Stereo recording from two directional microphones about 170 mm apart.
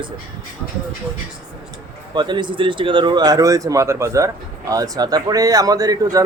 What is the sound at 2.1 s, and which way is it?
A man's voice, 25° right (ahead or behind).